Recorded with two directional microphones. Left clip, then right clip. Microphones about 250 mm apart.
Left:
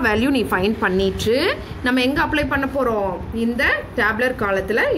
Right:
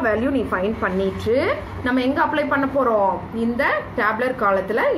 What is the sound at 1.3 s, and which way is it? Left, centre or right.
A woman's voice, left.